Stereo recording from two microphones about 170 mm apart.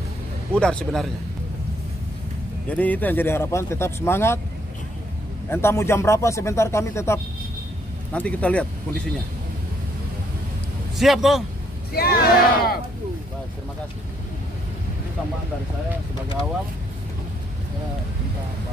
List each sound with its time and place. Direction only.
0.6 s speech: 5° left (ahead or behind)
2.7 s speech: 10° left (ahead or behind)
5.5 s speech: 15° left (ahead or behind)
11.0 s speech: centre (ahead or behind)
11.9 s speech: 65° left (ahead or behind)